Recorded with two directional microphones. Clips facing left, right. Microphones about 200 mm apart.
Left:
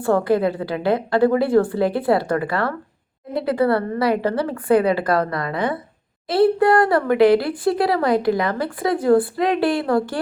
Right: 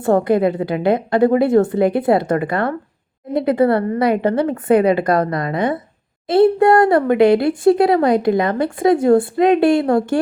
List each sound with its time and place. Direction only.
0.0 s speech: 20° right (ahead or behind)